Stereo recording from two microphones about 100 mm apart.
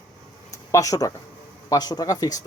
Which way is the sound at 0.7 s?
35° left (ahead or behind).